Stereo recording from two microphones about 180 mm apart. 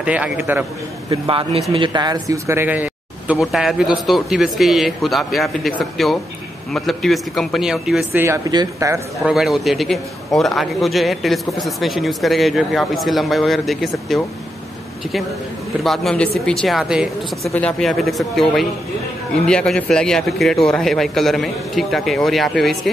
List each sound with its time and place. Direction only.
0.0 s speech: 5° right (ahead or behind)
1.1 s a man's voice: 30° right (ahead or behind); by 8.2 s 5° right (ahead or behind)
8.2 s speech: 20° right (ahead or behind)
9.3 s a man's voice: centre (ahead or behind)
15.8 s a man's voice: centre (ahead or behind)